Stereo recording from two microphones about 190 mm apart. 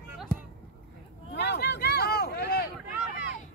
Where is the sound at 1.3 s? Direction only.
60° left (ahead or behind).